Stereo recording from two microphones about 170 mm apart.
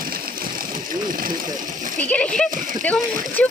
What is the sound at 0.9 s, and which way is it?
Speech, 55° right (ahead or behind).